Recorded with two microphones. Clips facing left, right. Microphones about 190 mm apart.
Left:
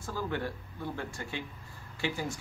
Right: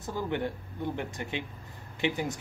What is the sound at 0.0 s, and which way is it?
Speech, 20° right (ahead or behind).